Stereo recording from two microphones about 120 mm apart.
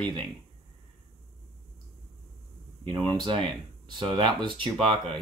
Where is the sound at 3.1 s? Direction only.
40° right (ahead or behind).